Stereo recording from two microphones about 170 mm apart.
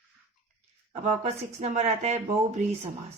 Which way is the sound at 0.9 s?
40° right (ahead or behind).